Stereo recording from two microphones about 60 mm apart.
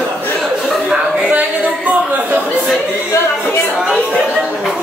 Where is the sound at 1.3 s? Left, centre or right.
Right.